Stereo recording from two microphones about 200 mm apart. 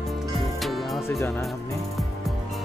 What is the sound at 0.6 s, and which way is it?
Music, centre (ahead or behind).